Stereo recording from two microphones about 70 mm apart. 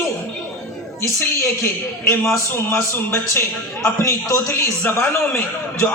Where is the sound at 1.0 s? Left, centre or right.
Left.